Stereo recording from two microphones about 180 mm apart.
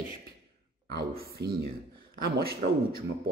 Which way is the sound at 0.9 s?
60° right (ahead or behind).